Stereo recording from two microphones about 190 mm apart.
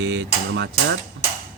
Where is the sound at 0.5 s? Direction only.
70° right (ahead or behind).